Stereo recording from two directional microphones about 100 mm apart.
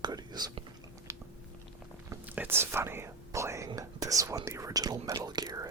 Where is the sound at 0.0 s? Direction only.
40° right (ahead or behind).